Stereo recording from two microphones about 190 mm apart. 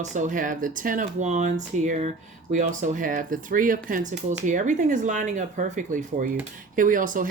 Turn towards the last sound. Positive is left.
turn(degrees=-45)  # may be behind; listen again after turning